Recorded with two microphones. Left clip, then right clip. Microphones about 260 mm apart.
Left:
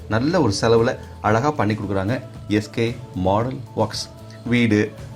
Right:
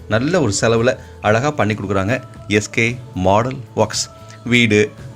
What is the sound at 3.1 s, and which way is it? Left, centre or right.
Speech, right.